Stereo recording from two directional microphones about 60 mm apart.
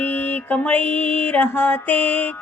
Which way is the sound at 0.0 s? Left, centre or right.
Left.